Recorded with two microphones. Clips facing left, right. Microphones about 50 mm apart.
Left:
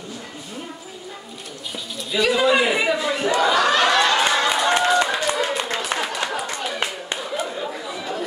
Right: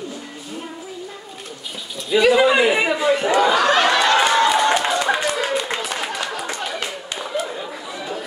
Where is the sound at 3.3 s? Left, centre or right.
Centre.